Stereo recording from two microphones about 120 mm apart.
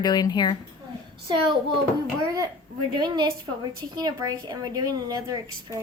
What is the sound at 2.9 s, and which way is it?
A woman's voice, 35° right (ahead or behind).